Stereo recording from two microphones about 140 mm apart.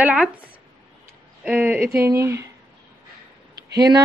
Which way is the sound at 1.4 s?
10° right (ahead or behind).